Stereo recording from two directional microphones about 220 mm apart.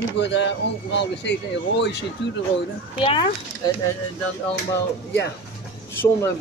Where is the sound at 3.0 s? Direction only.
20° left (ahead or behind).